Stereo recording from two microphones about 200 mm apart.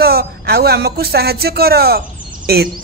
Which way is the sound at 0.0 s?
50° right (ahead or behind).